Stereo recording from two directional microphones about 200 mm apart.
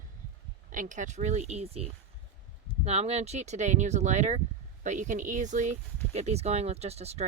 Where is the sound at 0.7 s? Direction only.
40° right (ahead or behind).